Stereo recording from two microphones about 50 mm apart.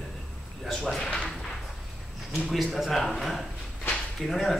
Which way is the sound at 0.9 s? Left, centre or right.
Centre.